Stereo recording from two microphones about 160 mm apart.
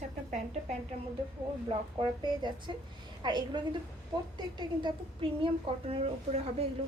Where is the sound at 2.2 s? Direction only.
30° right (ahead or behind).